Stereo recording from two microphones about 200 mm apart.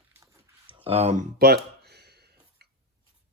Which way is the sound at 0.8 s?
30° right (ahead or behind).